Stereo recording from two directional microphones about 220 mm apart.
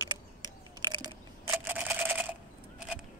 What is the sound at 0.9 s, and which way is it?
Camera, 15° right (ahead or behind).